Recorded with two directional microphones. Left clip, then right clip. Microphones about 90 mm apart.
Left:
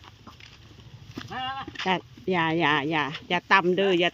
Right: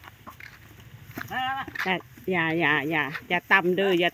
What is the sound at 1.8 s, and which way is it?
Speech, 20° left (ahead or behind).